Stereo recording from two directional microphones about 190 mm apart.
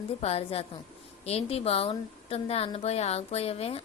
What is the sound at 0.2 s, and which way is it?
A woman's voice, 35° left (ahead or behind).